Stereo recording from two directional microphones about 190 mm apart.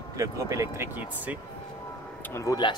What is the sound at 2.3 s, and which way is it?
Speech, 15° left (ahead or behind).